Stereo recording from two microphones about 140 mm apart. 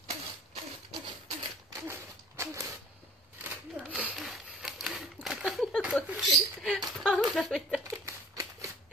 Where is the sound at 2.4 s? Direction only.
20° right (ahead or behind).